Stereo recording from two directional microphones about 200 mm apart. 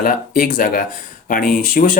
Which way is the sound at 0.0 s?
45° left (ahead or behind).